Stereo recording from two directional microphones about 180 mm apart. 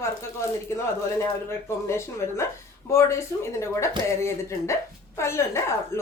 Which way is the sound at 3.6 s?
15° left (ahead or behind).